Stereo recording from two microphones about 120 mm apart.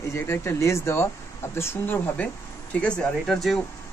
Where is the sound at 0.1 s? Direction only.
20° left (ahead or behind).